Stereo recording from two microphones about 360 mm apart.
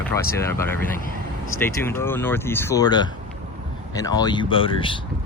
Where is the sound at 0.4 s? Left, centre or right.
Centre.